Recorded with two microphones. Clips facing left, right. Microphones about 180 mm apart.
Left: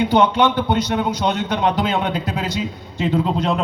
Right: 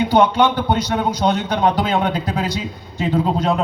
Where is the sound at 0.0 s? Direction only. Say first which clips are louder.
Right 1 dB; 35° right (ahead or behind).